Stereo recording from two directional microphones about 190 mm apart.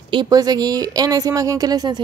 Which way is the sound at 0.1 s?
20° right (ahead or behind).